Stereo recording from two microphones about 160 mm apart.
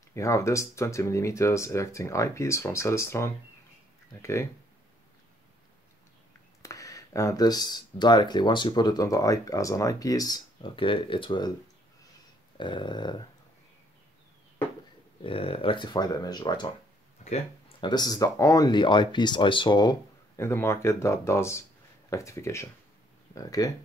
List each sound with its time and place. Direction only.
0.1 s speech: 20° left (ahead or behind)
6.6 s speech: 20° left (ahead or behind)
12.5 s speech: 30° left (ahead or behind)
15.2 s speech: 35° left (ahead or behind)
17.2 s speech: 40° left (ahead or behind)
20.3 s speech: 15° left (ahead or behind)